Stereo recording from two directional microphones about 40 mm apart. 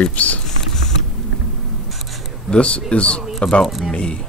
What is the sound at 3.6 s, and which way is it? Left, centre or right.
Speech, centre.